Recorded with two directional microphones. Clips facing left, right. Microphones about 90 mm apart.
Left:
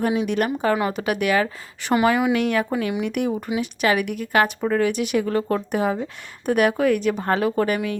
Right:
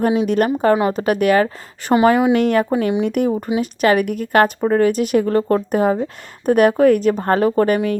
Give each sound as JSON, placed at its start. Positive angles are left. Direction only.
{"t": 0.3, "sound": "speech", "side_deg": -40}
{"t": 1.9, "sound": "speech", "side_deg": -30}
{"t": 2.7, "sound": "speech", "side_deg": -30}